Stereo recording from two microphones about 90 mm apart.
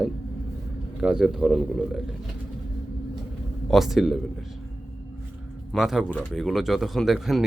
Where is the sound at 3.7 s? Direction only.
Centre (ahead or behind).